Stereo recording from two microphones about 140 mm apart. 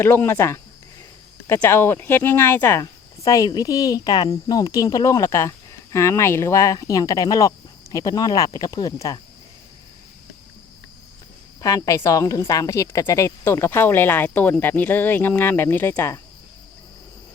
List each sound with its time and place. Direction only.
0.0 s speech: 15° left (ahead or behind)
1.6 s speech: 15° left (ahead or behind)
11.6 s speech: 25° left (ahead or behind)